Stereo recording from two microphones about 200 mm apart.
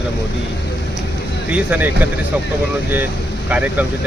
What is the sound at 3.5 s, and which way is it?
Speech, 10° right (ahead or behind).